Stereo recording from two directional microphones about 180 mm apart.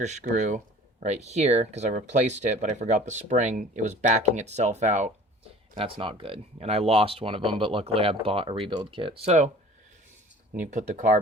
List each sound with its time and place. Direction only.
0.0 s speech: 40° right (ahead or behind)
5.7 s speech: 30° right (ahead or behind)
10.7 s speech: 45° right (ahead or behind)